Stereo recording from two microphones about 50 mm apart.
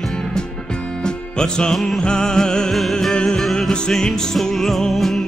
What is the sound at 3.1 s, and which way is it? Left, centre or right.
Music, centre.